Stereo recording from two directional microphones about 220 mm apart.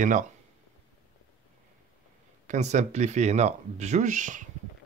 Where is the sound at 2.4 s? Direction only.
30° right (ahead or behind).